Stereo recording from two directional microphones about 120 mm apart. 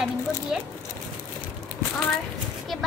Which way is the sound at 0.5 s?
5° right (ahead or behind).